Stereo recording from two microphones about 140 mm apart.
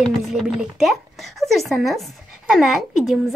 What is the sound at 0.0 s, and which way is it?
Speech, centre (ahead or behind).